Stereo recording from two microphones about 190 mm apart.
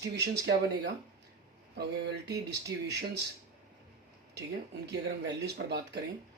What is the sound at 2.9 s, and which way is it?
Speech, 60° right (ahead or behind).